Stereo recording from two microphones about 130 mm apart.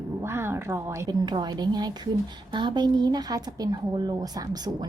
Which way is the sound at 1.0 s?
35° right (ahead or behind).